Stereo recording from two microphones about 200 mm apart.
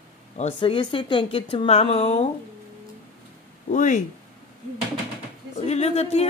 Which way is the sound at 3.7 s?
40° left (ahead or behind).